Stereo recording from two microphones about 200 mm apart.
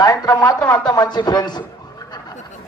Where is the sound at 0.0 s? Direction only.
20° left (ahead or behind).